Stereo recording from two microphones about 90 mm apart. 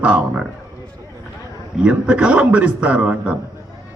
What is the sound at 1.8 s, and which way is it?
A man's voice, 10° right (ahead or behind).